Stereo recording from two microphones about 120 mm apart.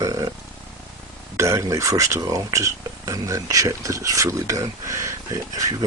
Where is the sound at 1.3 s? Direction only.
25° right (ahead or behind).